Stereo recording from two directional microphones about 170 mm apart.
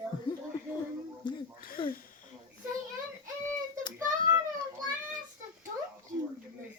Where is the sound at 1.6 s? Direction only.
55° left (ahead or behind).